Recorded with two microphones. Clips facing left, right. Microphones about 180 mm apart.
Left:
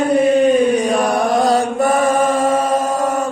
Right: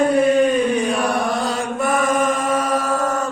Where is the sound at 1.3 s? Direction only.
40° left (ahead or behind); by 3.3 s 10° left (ahead or behind).